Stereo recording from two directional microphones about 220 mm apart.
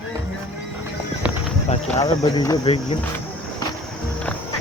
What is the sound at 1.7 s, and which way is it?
Speech, 30° left (ahead or behind).